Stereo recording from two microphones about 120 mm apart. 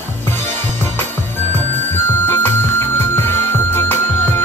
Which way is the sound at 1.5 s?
15° left (ahead or behind).